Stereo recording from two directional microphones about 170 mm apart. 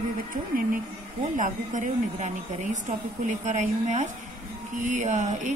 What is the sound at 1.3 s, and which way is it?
Speech, 45° right (ahead or behind).